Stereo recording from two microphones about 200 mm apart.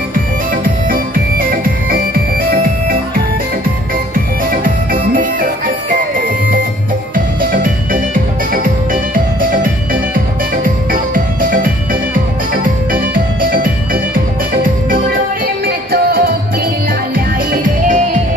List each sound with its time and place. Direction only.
0.8 s music: 45° right (ahead or behind)
4.1 s music: 45° right (ahead or behind)